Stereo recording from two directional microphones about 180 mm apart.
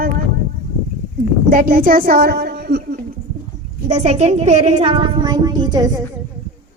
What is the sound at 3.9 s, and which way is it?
Speech, 40° right (ahead or behind).